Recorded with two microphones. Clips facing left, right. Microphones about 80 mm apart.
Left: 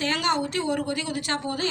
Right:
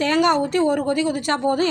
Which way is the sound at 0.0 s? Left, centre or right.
Right.